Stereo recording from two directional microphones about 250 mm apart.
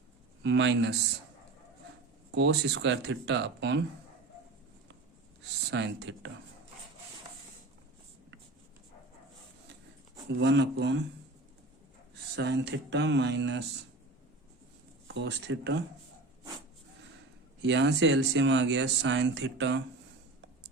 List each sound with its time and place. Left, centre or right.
0.4 s speech: right
2.3 s speech: right
5.4 s speech: right
10.3 s speech: right
12.1 s speech: right
15.0 s speech: right
17.6 s speech: right